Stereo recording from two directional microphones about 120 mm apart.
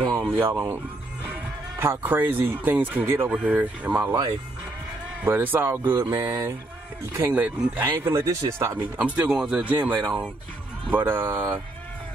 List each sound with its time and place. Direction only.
0.2 s speech: 15° right (ahead or behind)
1.8 s speech: 15° right (ahead or behind)
4.0 s mantra: 35° right (ahead or behind)
5.2 s speech: 15° right (ahead or behind)
5.9 s mantra: 35° right (ahead or behind)
7.2 s speech: 15° right (ahead or behind)